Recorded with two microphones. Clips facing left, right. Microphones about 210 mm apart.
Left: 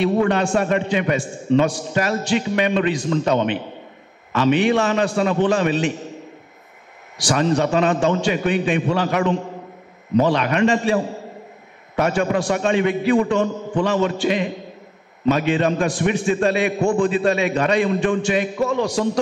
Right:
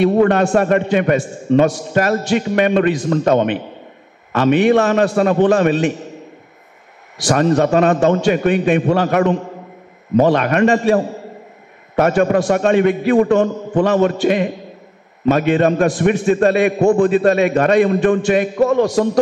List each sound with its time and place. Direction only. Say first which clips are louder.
0.0 s a man's voice: right 5 dB; 45° right (ahead or behind)
7.2 s a man's voice: right 4 dB; 45° right (ahead or behind)